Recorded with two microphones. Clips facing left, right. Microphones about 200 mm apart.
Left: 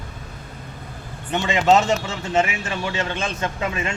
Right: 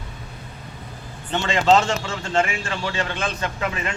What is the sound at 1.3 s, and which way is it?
Speech, 20° left (ahead or behind).